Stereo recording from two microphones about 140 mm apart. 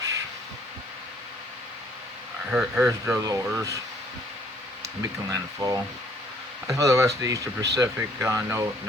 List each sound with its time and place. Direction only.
2.5 s speech: 10° right (ahead or behind)
2.8 s speech: 20° right (ahead or behind)
5.3 s speech: 25° right (ahead or behind)